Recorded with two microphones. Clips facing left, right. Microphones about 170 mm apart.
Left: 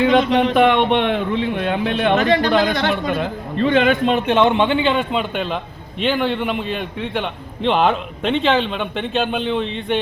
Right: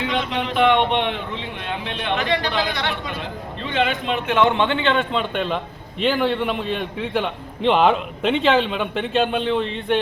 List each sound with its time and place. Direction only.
0.0 s speech: 45° left (ahead or behind)
4.3 s a man's voice: 20° left (ahead or behind); by 10.0 s centre (ahead or behind)